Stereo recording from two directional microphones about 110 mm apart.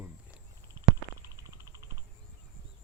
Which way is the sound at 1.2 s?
30° right (ahead or behind).